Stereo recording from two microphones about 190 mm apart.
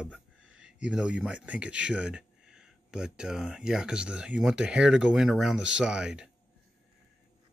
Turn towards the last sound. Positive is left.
turn(degrees=-5)  # may be behind; listen again after turning